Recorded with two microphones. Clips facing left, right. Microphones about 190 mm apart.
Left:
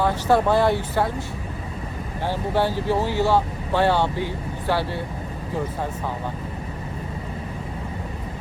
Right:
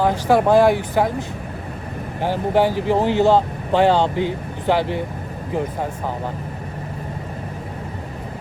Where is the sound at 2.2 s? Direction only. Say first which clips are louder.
Right 5 dB; 15° right (ahead or behind).